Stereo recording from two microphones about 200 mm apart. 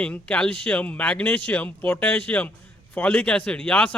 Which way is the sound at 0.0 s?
5° left (ahead or behind).